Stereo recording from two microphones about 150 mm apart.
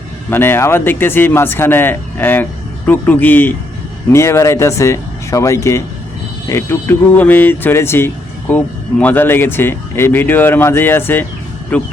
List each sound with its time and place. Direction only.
0.3 s speech: 15° left (ahead or behind)